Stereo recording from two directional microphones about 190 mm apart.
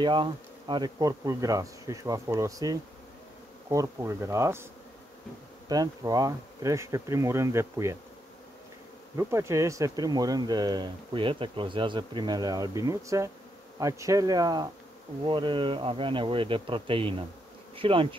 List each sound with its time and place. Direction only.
0.0 s speech: 25° right (ahead or behind)
3.6 s bee: 15° right (ahead or behind)
5.7 s bee: 20° right (ahead or behind)
9.1 s speech: 15° right (ahead or behind)